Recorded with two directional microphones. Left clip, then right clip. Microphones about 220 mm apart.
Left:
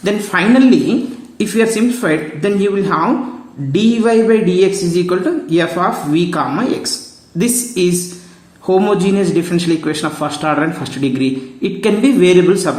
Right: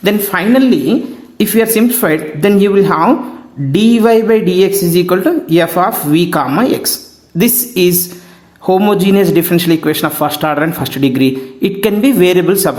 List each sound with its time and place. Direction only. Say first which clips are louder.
0.0 s speech: right 2 dB; 35° right (ahead or behind)